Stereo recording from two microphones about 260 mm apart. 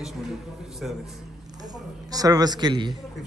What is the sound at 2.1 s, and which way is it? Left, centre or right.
Speech, centre.